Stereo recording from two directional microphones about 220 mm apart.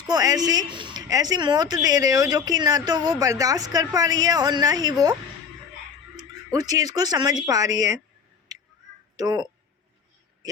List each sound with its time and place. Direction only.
0.1 s speech: 15° right (ahead or behind)
6.1 s speech: 15° right (ahead or behind)
8.5 s a sound: 15° right (ahead or behind)
9.1 s speech: 15° right (ahead or behind)